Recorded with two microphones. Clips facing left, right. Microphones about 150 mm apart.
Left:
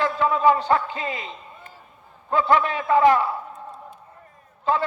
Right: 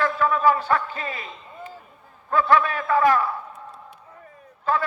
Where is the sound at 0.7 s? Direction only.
20° left (ahead or behind).